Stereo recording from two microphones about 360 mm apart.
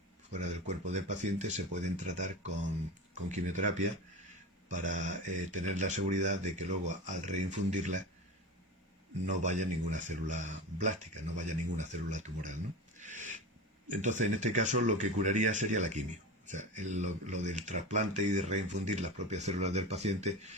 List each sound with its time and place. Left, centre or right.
0.3 s speech: centre
9.2 s speech: centre
13.0 s a sound: centre
14.0 s speech: centre